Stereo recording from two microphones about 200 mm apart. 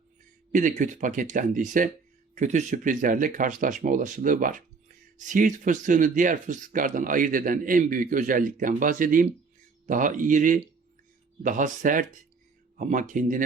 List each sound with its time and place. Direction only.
0.5 s speech: 40° right (ahead or behind)